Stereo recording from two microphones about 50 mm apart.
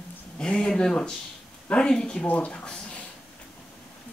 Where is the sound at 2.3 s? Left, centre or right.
Left.